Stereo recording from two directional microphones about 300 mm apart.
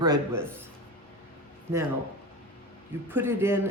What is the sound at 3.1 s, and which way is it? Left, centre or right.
Speech, centre.